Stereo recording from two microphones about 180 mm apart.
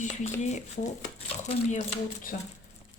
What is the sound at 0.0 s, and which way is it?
Speech, 40° left (ahead or behind).